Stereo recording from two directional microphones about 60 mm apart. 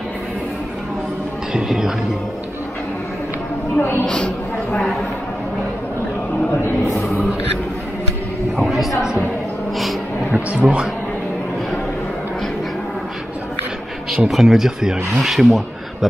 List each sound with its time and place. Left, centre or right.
1.5 s speech: centre
4.0 s speech: centre
7.0 s a sound: centre
8.5 s speech: centre
10.3 s a man's voice: right
14.1 s speech: centre